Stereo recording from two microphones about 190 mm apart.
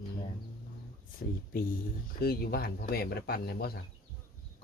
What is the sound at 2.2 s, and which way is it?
Speech, 55° left (ahead or behind).